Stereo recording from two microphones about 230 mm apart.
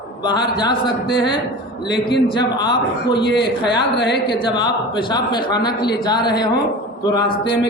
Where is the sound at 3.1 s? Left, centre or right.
Left.